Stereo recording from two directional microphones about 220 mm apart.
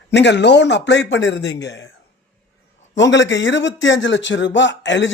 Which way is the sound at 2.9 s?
55° left (ahead or behind).